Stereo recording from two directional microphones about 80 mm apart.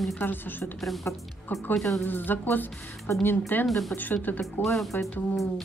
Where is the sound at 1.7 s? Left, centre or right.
Centre.